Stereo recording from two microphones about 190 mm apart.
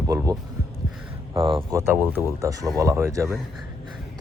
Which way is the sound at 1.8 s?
10° right (ahead or behind).